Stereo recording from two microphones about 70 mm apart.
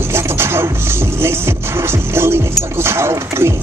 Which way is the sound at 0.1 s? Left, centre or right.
Right.